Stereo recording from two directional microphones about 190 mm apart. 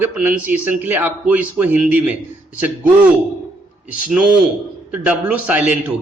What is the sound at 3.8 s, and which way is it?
A man's voice, 5° right (ahead or behind).